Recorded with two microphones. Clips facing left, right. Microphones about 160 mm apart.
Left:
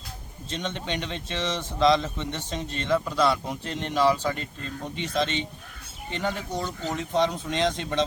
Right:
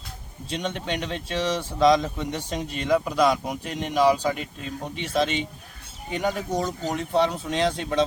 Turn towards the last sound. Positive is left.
turn(degrees=-5)  # may be behind; listen again after turning